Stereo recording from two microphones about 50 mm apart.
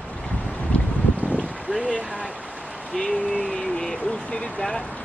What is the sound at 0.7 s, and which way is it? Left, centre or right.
Boat, left.